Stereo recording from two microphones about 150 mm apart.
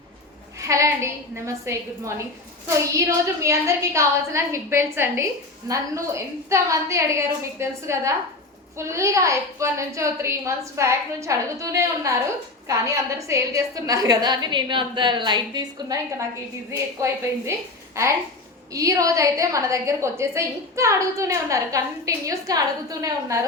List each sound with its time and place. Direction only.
0.7 s a woman's voice: 20° right (ahead or behind)
18.7 s a woman's voice: 20° right (ahead or behind)